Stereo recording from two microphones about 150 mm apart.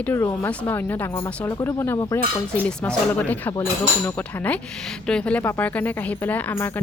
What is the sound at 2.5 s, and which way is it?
A woman's voice, 10° left (ahead or behind).